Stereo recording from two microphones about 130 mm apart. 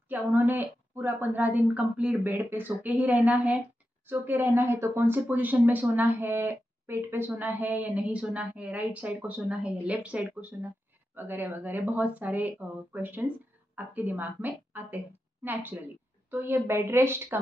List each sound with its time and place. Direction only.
0.1 s a woman's voice: 15° right (ahead or behind)